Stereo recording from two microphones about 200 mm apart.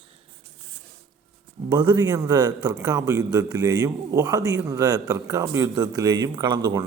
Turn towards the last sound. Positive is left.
turn(degrees=-20)  # may be behind; listen again after turning